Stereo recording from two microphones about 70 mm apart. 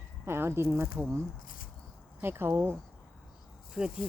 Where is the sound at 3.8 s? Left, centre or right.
Centre.